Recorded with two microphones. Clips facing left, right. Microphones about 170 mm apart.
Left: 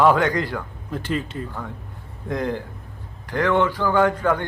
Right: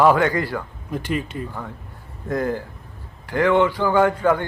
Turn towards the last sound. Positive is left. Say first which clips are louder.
# right 2 dB
turn(degrees=-10)  # may be behind; listen again after turning